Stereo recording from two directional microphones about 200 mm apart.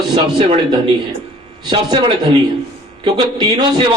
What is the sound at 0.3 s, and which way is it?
Speech, 25° right (ahead or behind).